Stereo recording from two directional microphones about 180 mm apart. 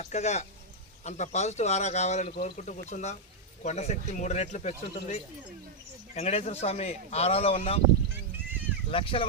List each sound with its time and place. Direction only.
0.0 s a man's voice: 40° left (ahead or behind)
8.9 s speech: 30° left (ahead or behind)